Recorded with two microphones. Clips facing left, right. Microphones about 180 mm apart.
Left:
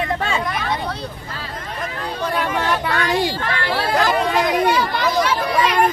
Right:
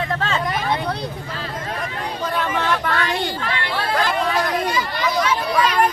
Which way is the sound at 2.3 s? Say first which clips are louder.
Even; 10° left (ahead or behind).